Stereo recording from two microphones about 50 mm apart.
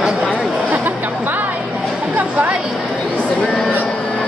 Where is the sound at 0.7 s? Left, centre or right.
Right.